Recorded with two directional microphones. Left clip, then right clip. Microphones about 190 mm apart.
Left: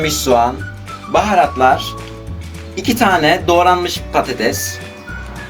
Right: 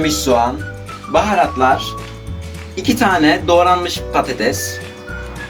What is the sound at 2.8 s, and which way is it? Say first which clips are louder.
Speech: left 1 dB; 40° left (ahead or behind).